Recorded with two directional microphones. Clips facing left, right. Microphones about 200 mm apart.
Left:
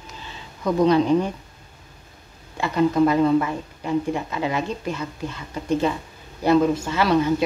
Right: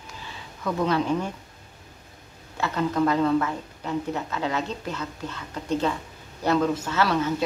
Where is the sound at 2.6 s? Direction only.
10° left (ahead or behind).